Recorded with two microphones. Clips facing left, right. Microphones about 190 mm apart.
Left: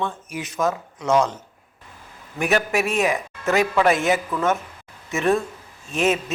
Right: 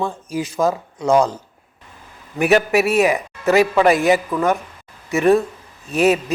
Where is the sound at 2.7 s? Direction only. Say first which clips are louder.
Right 6 dB; 5° right (ahead or behind).